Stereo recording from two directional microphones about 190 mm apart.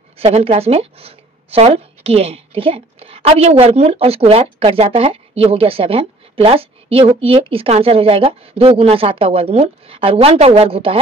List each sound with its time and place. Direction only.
0.2 s speech: 30° right (ahead or behind)